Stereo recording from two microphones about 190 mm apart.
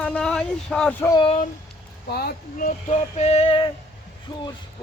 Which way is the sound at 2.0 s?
55° left (ahead or behind).